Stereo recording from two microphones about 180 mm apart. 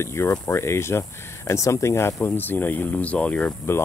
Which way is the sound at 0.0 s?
15° left (ahead or behind).